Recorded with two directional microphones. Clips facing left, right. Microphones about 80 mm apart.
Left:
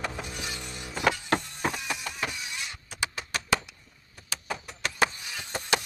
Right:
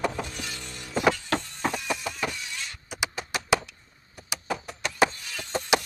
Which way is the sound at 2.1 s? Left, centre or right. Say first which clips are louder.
Right 2 dB; centre.